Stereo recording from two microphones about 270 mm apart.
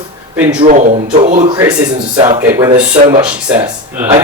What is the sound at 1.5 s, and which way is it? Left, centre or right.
Speech, centre.